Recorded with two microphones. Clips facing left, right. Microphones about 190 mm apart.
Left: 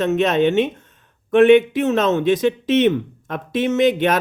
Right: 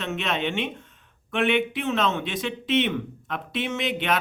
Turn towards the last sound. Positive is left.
turn(degrees=45)  # may be behind; listen again after turning